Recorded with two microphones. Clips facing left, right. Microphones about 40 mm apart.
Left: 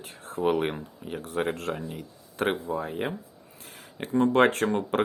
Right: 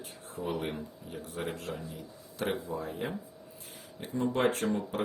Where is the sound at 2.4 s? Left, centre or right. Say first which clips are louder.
Left 6 dB; left.